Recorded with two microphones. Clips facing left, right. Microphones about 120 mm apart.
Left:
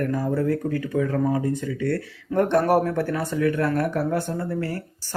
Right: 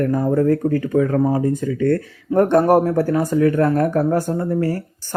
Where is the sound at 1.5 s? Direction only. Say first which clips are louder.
Right 6 dB; 45° right (ahead or behind).